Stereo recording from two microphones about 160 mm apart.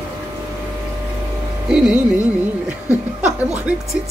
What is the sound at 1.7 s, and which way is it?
Speech, 5° right (ahead or behind).